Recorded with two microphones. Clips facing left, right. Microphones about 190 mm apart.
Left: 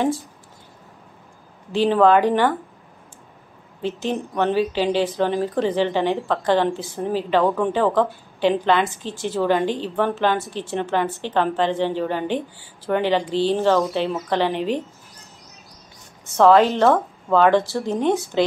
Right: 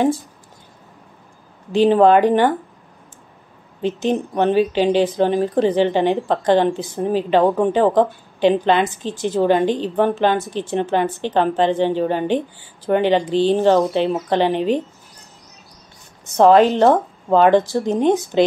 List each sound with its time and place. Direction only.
1.7 s a woman's voice: 20° right (ahead or behind)
3.8 s a woman's voice: 20° right (ahead or behind)
16.3 s a woman's voice: 15° right (ahead or behind)